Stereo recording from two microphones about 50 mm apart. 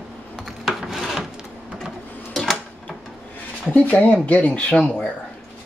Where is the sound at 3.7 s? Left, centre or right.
Left.